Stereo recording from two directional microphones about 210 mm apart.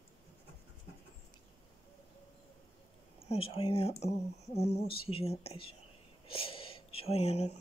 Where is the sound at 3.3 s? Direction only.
25° left (ahead or behind).